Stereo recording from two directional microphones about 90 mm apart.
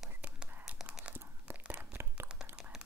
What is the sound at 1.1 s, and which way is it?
Tearing, 25° right (ahead or behind).